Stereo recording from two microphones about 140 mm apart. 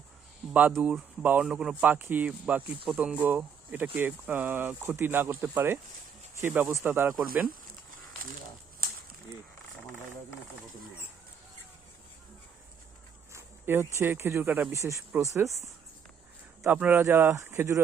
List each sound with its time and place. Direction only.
0.8 s speech: 10° right (ahead or behind)
13.3 s speech: 20° right (ahead or behind)